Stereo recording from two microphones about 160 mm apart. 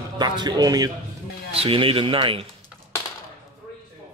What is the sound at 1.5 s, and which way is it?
Speech, 35° right (ahead or behind).